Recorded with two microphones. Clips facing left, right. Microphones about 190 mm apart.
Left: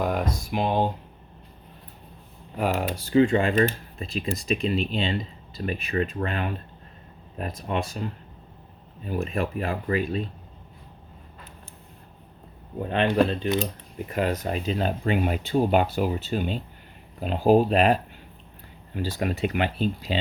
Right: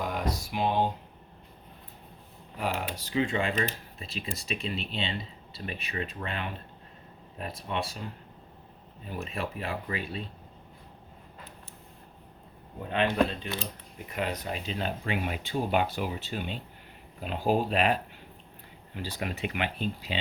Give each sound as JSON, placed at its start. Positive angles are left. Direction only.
{"t": 0.0, "sound": "a sound", "side_deg": 50}
{"t": 2.6, "sound": "speech", "side_deg": 45}
{"t": 9.0, "sound": "speech", "side_deg": 45}
{"t": 12.9, "sound": "speech", "side_deg": 35}